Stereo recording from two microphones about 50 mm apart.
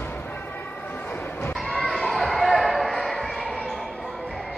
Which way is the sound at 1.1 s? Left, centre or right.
Left.